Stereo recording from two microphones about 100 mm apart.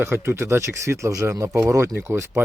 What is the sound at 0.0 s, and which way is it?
Speech, 25° right (ahead or behind).